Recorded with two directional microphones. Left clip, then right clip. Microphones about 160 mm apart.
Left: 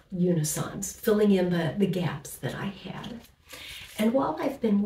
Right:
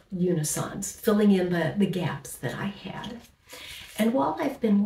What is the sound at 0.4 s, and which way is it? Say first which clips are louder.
A woman's voice: right 1 dB; 20° right (ahead or behind).